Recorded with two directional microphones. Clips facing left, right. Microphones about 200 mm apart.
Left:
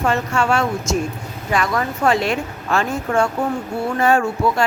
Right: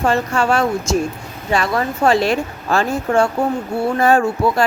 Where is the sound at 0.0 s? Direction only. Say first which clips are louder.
Right 2 dB; 35° right (ahead or behind).